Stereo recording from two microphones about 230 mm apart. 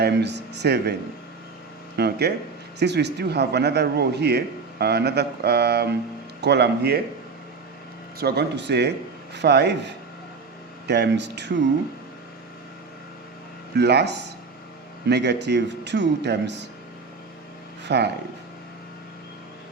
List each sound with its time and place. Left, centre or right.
0.0 s a man's voice: right
2.0 s a man's voice: right
8.2 s a man's voice: right
13.7 s a man's voice: right
17.8 s a man's voice: right